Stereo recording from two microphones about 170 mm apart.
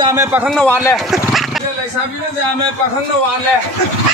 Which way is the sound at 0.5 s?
5° left (ahead or behind).